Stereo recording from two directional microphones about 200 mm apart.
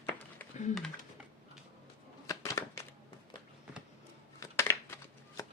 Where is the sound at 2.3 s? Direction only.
15° left (ahead or behind).